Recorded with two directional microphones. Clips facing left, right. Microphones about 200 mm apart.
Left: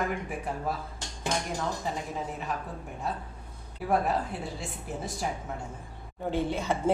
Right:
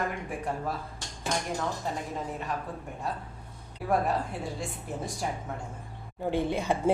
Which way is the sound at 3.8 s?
Centre (ahead or behind).